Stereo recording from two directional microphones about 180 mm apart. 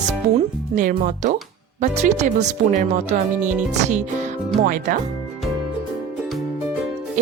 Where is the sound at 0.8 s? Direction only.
45° right (ahead or behind).